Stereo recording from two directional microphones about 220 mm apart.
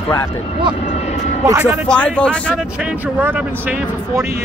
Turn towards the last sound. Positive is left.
turn(degrees=-5)  # may be behind; listen again after turning